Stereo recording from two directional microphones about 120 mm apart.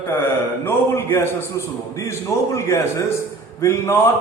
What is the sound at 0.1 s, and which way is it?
A man's voice, 20° left (ahead or behind).